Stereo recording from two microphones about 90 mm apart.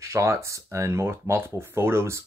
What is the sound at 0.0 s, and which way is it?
Speech, 30° right (ahead or behind).